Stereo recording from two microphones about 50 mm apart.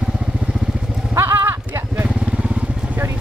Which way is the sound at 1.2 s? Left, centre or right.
Right.